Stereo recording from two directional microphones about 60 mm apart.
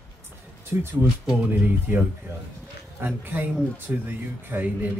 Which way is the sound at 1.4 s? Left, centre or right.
Right.